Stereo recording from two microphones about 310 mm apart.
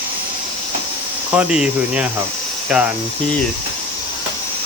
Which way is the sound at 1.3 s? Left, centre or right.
Centre.